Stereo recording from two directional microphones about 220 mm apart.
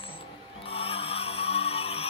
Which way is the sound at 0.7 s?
25° left (ahead or behind).